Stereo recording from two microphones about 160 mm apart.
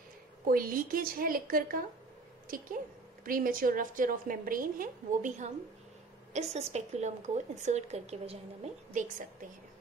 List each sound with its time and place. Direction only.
0.5 s a woman's voice: 60° right (ahead or behind)
6.3 s speech: 45° right (ahead or behind)